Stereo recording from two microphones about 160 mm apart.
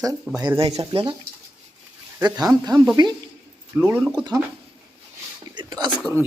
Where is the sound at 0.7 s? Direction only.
35° right (ahead or behind).